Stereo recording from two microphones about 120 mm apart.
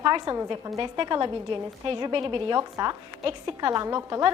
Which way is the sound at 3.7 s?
25° right (ahead or behind).